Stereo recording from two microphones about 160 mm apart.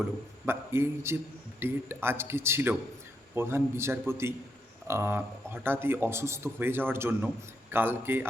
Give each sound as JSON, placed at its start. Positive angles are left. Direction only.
{"t": 0.4, "sound": "speech", "side_deg": -15}